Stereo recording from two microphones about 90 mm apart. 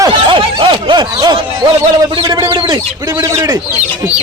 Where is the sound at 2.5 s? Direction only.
55° right (ahead or behind).